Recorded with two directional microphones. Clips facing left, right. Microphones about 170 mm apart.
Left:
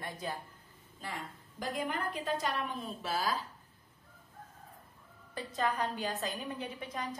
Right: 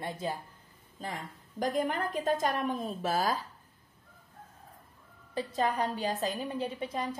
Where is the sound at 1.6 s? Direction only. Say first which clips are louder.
Right 6 dB; 45° right (ahead or behind).